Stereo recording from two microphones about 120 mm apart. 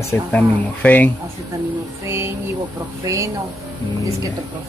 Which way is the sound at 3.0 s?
25° right (ahead or behind).